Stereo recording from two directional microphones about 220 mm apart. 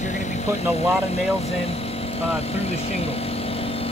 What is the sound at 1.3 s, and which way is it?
Vehicle, 30° left (ahead or behind).